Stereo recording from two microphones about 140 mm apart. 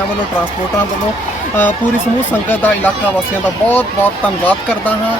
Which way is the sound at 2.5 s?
15° left (ahead or behind).